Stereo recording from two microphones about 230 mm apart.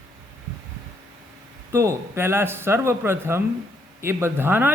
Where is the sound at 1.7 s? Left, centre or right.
Centre.